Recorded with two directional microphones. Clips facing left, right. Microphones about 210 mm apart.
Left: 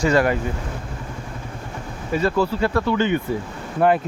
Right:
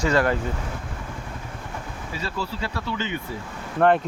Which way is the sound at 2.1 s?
55° left (ahead or behind).